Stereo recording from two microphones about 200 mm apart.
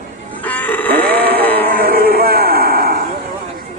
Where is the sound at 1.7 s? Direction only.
50° right (ahead or behind).